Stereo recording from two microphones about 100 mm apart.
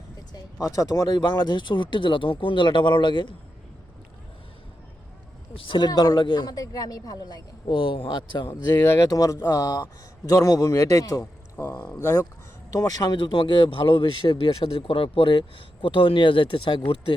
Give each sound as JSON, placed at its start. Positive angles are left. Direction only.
{"t": 0.3, "sound": "speech", "side_deg": 35}
{"t": 5.5, "sound": "speech", "side_deg": 55}
{"t": 6.6, "sound": "a man's voice", "side_deg": 40}
{"t": 7.7, "sound": "a man's voice", "side_deg": 60}
{"t": 11.8, "sound": "speech", "side_deg": 25}
{"t": 12.7, "sound": "speech", "side_deg": 40}